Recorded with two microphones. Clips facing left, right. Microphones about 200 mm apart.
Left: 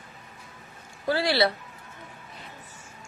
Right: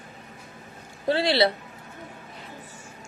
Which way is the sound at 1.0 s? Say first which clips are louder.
Right 2 dB; 25° right (ahead or behind).